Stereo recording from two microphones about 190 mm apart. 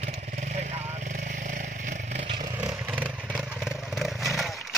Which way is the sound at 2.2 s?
25° right (ahead or behind).